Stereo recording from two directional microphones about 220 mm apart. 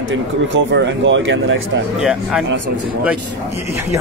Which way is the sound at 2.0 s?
5° right (ahead or behind).